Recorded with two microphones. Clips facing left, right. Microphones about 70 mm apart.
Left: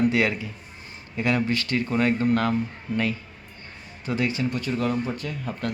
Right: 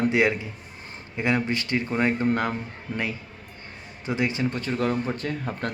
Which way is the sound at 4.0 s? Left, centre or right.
Right.